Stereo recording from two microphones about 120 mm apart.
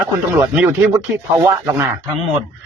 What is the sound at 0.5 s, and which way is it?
Speech, 15° right (ahead or behind).